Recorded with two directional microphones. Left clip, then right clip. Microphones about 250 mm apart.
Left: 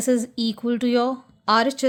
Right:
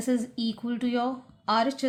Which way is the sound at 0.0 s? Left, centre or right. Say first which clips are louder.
Left 7 dB; left.